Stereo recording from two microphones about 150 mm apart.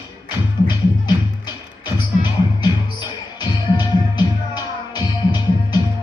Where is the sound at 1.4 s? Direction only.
30° left (ahead or behind).